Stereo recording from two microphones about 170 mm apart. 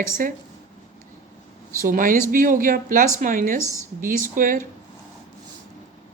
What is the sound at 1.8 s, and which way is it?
Speech, 55° right (ahead or behind).